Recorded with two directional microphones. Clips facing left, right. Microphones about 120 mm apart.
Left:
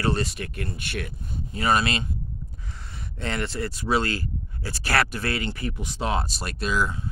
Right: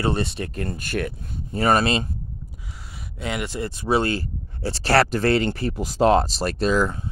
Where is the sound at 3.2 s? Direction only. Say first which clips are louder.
Right 1 dB; 10° right (ahead or behind); by 6.9 s 40° right (ahead or behind).